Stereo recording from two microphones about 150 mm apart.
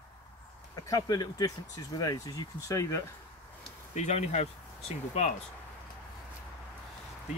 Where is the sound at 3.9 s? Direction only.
50° left (ahead or behind).